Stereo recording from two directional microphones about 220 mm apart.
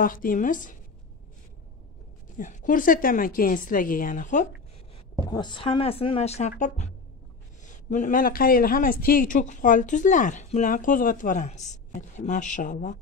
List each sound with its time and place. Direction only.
0.0 s a man's voice: 40° left (ahead or behind)
2.3 s a man's voice: 35° left (ahead or behind)
5.3 s speech: 20° left (ahead or behind)
7.6 s a man's voice: 35° left (ahead or behind)